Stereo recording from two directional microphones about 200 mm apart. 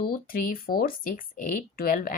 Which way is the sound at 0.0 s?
45° left (ahead or behind).